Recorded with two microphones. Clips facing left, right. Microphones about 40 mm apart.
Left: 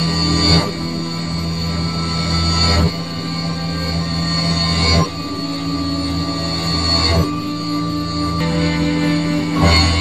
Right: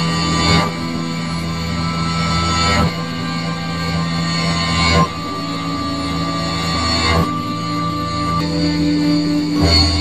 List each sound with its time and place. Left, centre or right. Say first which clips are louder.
0.0 s music: even; right
2.3 s music: right 2 dB; right
4.5 s music: right 2 dB; right
6.9 s music: right 1 dB; right
8.5 s music: right 2 dB; left